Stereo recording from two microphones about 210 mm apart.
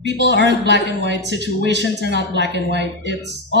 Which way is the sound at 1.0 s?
55° right (ahead or behind).